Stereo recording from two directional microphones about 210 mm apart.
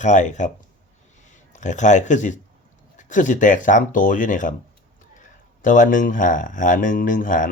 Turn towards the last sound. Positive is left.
turn(degrees=40)  # may be behind; listen again after turning